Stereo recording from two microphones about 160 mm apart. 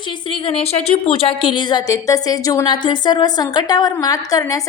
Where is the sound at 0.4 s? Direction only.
40° left (ahead or behind).